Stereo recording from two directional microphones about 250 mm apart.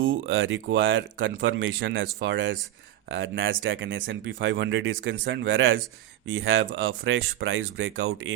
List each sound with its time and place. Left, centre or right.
0.0 s speech: right